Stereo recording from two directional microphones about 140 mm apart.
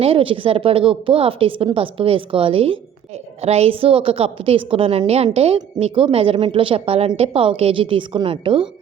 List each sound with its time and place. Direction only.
0.0 s a woman's voice: 40° right (ahead or behind)